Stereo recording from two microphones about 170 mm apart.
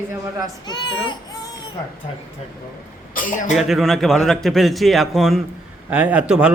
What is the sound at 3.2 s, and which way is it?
Speech, 50° left (ahead or behind).